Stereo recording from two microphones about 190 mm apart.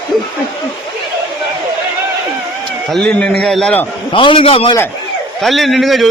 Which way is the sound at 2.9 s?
5° left (ahead or behind).